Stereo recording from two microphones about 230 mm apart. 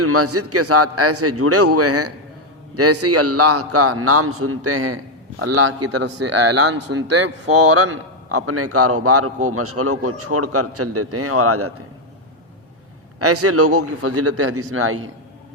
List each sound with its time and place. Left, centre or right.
0.0 s a man's voice: right
7.1 s a man's voice: right
13.1 s a man's voice: right